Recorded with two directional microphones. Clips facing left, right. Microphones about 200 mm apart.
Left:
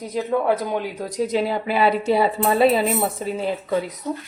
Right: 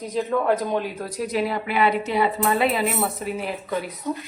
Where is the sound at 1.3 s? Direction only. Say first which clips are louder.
Even; 30° left (ahead or behind).